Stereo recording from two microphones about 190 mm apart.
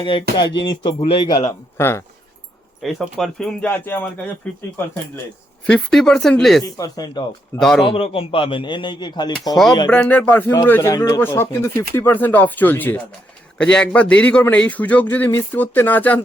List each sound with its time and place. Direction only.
0.0 s speech: 25° left (ahead or behind)
2.8 s speech: 5° left (ahead or behind)
5.6 s speech: 5° left (ahead or behind)
6.7 s speech: 20° left (ahead or behind)
7.6 s speech: centre (ahead or behind)
7.9 s speech: 30° left (ahead or behind)
9.9 s speech: 5° left (ahead or behind)